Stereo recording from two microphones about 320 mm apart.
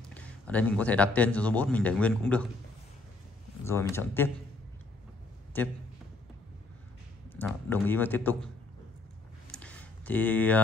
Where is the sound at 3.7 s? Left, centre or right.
Centre.